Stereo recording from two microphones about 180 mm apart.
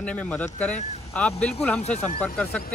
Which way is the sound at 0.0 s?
5° left (ahead or behind).